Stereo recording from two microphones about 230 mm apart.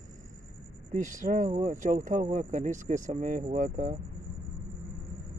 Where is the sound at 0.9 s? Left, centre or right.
Right.